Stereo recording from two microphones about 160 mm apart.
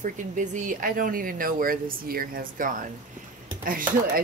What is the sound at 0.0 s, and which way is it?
Speech, 50° right (ahead or behind).